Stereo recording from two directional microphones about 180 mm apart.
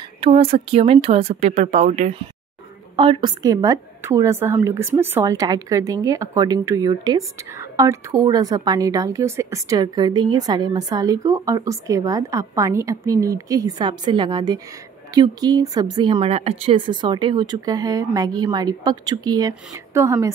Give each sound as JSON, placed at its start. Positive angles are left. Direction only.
{"t": 0.2, "sound": "speech", "side_deg": -30}
{"t": 3.0, "sound": "a woman's voice", "side_deg": -25}